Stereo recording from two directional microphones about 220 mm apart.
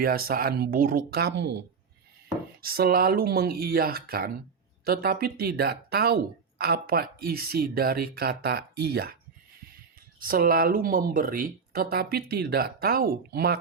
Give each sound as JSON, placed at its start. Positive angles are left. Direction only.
{"t": 0.0, "sound": "speech", "side_deg": -45}
{"t": 2.6, "sound": "speech", "side_deg": -45}
{"t": 10.2, "sound": "speech", "side_deg": -40}